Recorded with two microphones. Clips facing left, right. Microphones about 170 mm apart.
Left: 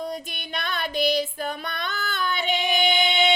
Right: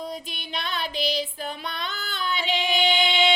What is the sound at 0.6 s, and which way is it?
Music, 50° left (ahead or behind).